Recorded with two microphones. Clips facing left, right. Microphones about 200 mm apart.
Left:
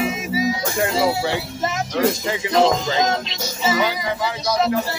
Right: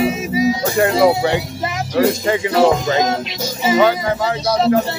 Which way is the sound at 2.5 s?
10° right (ahead or behind).